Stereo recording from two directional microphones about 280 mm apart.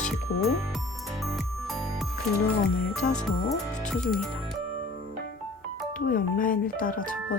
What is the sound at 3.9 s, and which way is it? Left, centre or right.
Speech, centre.